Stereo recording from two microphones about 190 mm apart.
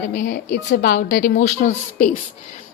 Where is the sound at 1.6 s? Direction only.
40° left (ahead or behind).